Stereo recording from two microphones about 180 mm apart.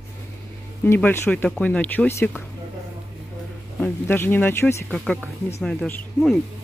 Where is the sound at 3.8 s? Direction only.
10° left (ahead or behind).